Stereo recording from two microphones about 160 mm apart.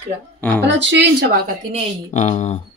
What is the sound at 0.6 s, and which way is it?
Speech, 90° right.